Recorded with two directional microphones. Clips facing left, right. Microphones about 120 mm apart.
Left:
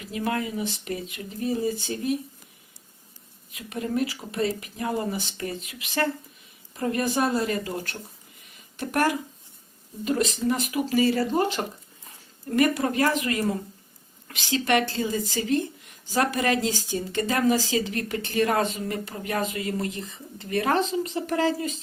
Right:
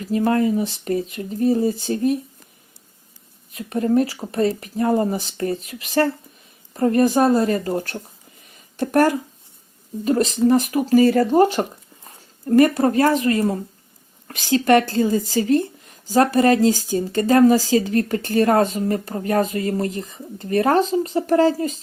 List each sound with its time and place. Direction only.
0.0 s speech: 40° right (ahead or behind)
3.5 s speech: 40° right (ahead or behind)
8.5 s a sound: 35° right (ahead or behind)
10.0 s speech: 40° right (ahead or behind)